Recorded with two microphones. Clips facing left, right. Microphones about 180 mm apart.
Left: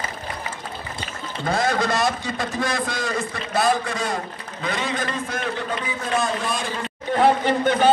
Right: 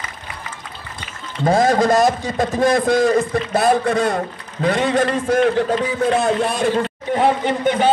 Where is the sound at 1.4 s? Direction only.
45° right (ahead or behind); by 6.8 s 65° right (ahead or behind).